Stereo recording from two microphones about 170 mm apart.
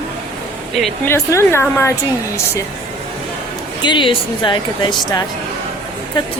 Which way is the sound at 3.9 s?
30° left (ahead or behind).